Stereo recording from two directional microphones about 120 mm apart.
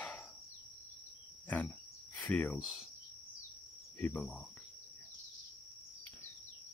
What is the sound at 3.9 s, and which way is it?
Insect, 10° left (ahead or behind).